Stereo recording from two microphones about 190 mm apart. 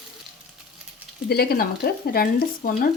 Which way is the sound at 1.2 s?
55° left (ahead or behind).